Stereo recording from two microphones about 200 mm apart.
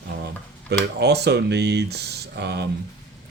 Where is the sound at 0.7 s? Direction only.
55° right (ahead or behind).